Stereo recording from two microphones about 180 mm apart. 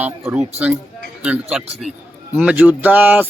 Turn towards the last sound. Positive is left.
turn(degrees=-10)  # may be behind; listen again after turning